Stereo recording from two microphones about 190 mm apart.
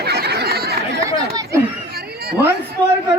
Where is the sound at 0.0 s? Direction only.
60° right (ahead or behind).